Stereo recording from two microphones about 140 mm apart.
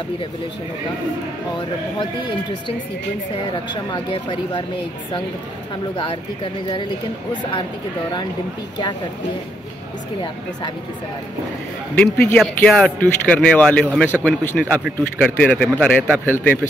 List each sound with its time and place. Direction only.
3.9 s speech: 35° left (ahead or behind)
5.9 s speech: 40° left (ahead or behind)
11.9 s speech: 10° left (ahead or behind)